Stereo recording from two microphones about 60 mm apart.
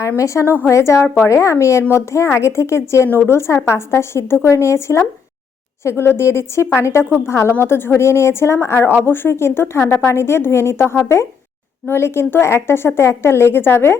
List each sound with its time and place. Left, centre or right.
0.2 s a woman's voice: left